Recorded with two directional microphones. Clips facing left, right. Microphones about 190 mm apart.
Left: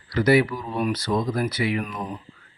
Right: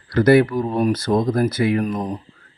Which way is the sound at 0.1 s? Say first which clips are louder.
Right 5 dB; 50° right (ahead or behind).